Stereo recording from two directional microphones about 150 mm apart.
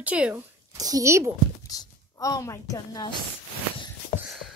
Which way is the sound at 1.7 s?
25° left (ahead or behind).